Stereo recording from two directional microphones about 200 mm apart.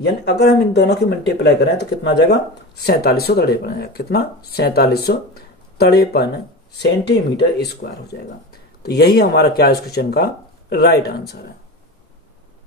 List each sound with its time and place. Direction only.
0.0 s speech: 55° left (ahead or behind)